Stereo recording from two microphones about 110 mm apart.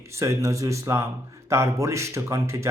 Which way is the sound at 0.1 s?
25° right (ahead or behind).